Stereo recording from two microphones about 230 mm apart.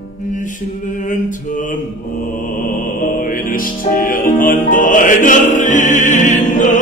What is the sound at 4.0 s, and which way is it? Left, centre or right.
Music, left.